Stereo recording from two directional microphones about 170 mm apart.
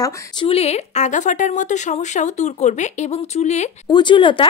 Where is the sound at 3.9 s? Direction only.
25° left (ahead or behind).